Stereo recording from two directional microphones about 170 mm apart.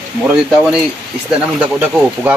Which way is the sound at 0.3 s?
5° right (ahead or behind).